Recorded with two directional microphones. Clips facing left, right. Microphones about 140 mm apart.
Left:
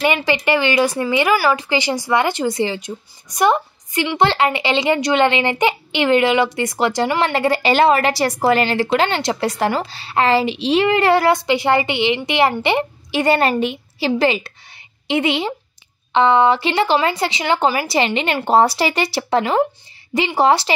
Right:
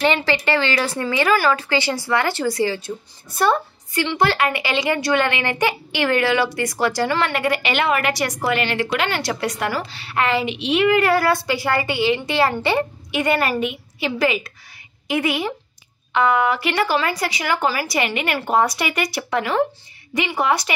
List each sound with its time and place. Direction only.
0.0 s speech: 15° left (ahead or behind)
1.3 s a woman's voice: 5° left (ahead or behind)
13.1 s a woman's voice: 30° left (ahead or behind)